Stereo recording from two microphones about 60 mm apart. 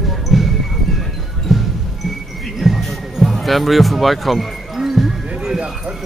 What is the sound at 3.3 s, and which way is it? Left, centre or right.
Speech, centre.